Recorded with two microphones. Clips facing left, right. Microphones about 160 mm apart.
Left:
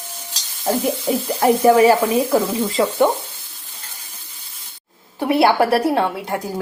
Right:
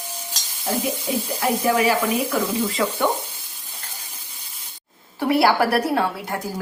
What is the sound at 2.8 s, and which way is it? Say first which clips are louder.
Speech: left 7 dB; 25° left (ahead or behind).